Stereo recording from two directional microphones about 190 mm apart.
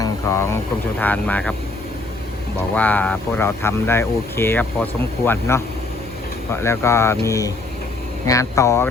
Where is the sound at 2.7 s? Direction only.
10° left (ahead or behind).